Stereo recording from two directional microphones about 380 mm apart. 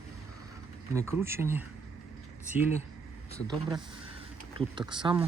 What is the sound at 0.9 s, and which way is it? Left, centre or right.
Speech, centre.